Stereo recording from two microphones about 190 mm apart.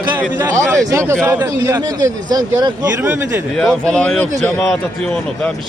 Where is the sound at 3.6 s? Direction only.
5° left (ahead or behind).